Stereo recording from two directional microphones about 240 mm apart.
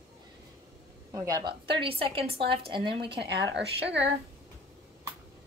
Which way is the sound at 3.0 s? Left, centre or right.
Right.